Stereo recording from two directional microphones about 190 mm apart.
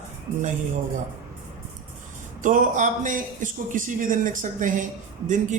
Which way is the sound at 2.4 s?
45° right (ahead or behind).